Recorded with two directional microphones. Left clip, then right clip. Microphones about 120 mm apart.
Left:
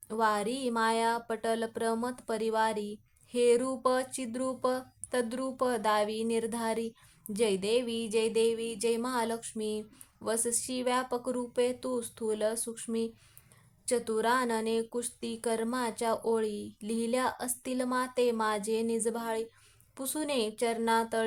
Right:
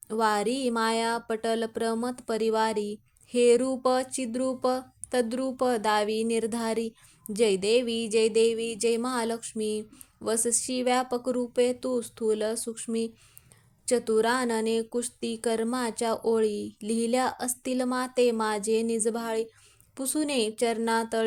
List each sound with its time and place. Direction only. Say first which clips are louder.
0.1 s speech: right 4 dB; 30° right (ahead or behind)